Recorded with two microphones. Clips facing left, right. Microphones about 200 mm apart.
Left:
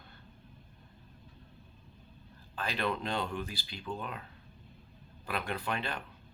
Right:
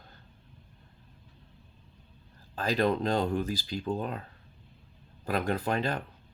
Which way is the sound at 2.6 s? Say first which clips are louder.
Right 7 dB; 40° right (ahead or behind).